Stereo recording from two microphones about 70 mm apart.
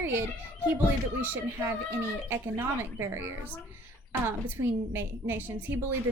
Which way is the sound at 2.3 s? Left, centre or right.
Right.